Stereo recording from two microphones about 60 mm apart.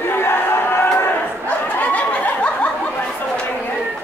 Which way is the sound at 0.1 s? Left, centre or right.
Left.